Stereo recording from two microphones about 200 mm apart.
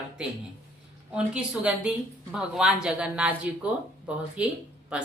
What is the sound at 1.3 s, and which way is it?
Speech, 5° right (ahead or behind).